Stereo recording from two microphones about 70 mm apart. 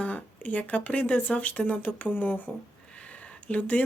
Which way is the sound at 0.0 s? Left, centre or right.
Left.